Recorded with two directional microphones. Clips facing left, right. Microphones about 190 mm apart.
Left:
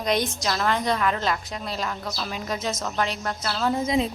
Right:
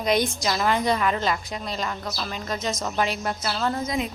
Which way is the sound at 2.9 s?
5° right (ahead or behind).